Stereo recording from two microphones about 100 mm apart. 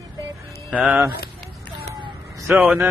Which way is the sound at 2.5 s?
15° right (ahead or behind).